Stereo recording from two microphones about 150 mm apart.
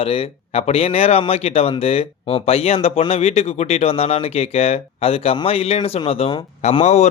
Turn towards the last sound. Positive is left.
turn(degrees=45)  # may be behind; listen again after turning